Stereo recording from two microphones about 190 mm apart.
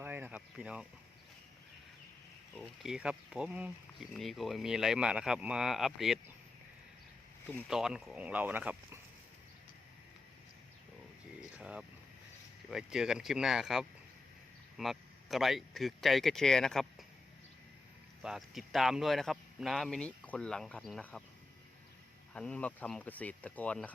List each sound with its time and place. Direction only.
0.0 s a sound: 10° right (ahead or behind)
2.6 s speech: 5° right (ahead or behind)
7.7 s speech: 5° right (ahead or behind)
11.5 s speech: 5° right (ahead or behind)
18.2 s speech: centre (ahead or behind)
22.3 s speech: 5° left (ahead or behind)